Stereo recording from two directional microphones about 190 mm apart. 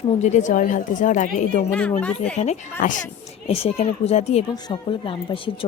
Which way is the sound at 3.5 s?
30° left (ahead or behind).